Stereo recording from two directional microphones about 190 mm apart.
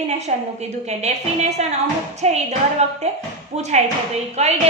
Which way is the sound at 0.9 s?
35° right (ahead or behind).